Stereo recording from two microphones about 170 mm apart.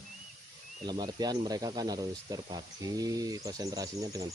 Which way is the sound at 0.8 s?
25° right (ahead or behind).